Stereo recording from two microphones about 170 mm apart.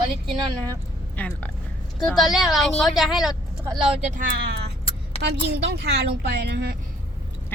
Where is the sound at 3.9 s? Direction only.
45° right (ahead or behind).